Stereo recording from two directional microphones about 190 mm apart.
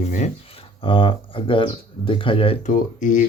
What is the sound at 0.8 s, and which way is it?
Speech, 25° left (ahead or behind).